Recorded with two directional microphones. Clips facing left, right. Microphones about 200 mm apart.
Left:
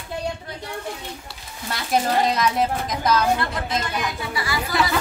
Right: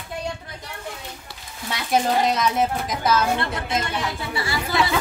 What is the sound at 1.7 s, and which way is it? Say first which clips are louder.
Speech: even; centre (ahead or behind).